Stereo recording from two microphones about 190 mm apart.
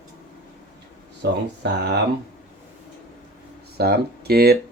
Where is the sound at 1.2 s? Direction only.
65° right (ahead or behind).